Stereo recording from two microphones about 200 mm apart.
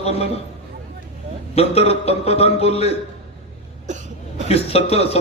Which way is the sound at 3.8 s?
35° right (ahead or behind).